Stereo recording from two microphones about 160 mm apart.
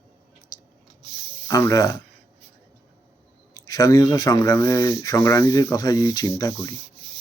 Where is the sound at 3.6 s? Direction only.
20° left (ahead or behind).